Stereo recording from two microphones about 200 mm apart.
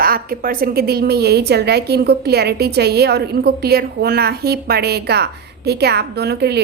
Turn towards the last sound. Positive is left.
turn(degrees=-55)  # may be behind; listen again after turning